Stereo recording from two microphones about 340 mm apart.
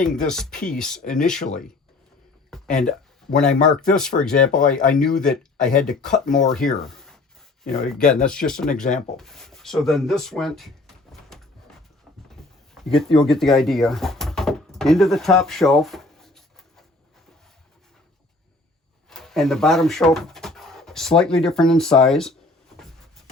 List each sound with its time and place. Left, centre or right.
0.3 s speech: centre
2.8 s speech: centre
8.7 s speech: left
9.1 s speech: centre
12.3 s a sound: centre
19.1 s speech: centre